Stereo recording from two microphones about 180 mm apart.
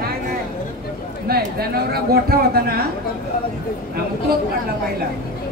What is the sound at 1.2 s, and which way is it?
Speech, 60° right (ahead or behind).